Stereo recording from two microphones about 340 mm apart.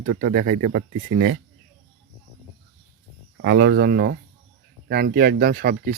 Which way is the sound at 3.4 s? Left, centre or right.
Right.